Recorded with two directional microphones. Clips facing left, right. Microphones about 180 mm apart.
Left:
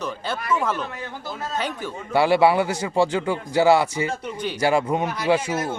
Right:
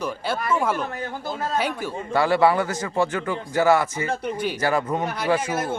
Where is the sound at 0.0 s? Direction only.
10° right (ahead or behind).